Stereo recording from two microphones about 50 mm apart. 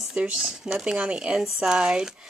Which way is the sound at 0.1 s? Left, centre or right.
Centre.